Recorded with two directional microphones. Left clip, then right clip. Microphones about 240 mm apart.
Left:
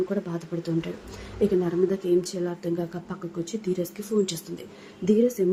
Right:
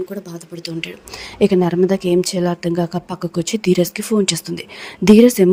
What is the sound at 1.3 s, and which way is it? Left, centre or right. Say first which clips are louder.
A woman's voice: right 9 dB; right.